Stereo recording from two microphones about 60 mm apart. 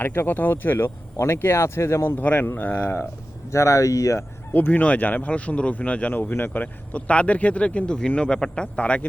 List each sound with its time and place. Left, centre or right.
0.0 s speech: left
0.9 s speech: left
2.2 s speech: left
3.5 s speech: left
4.5 s speech: left